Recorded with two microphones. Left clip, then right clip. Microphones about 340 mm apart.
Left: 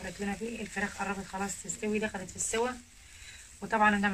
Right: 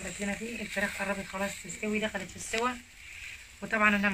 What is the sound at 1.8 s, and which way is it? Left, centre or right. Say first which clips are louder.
Speech: even; left.